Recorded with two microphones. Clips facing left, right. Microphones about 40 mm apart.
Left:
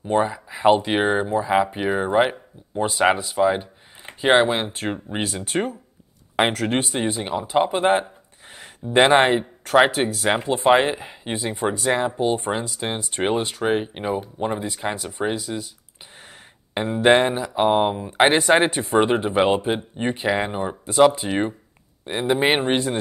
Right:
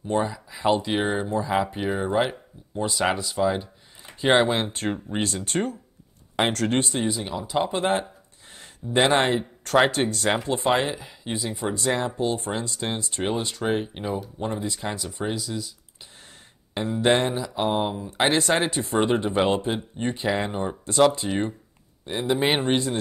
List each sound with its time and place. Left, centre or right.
0.0 s speech: left
7.0 s speech: left
9.7 s speech: centre
10.5 s speech: left
16.7 s speech: left